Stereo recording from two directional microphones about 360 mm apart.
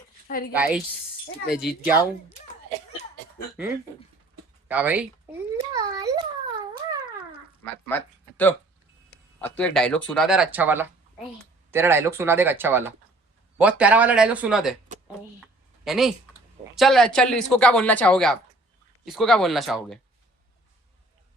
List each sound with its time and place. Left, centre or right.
0.3 s a woman's voice: left
0.5 s speech: centre
4.7 s speech: centre
7.6 s speech: centre
15.8 s speech: centre